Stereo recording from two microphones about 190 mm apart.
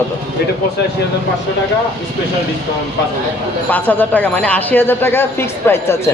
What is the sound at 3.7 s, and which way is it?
Speech, 10° left (ahead or behind).